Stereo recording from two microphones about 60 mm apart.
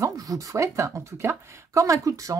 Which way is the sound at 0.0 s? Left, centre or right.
Right.